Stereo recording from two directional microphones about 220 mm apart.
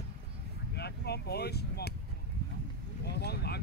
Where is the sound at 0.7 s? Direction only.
50° left (ahead or behind).